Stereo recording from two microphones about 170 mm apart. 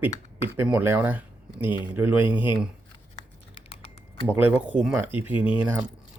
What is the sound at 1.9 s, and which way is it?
Speech, 10° right (ahead or behind).